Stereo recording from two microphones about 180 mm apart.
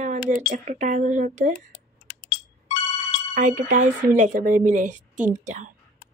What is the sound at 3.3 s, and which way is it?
A woman's voice, 45° right (ahead or behind).